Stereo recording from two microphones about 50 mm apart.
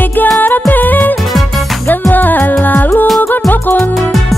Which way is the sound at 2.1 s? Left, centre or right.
Left.